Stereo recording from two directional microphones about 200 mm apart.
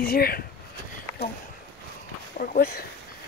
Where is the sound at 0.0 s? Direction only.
50° left (ahead or behind).